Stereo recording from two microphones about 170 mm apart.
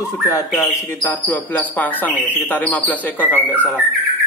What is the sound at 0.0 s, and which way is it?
Speech, 20° left (ahead or behind).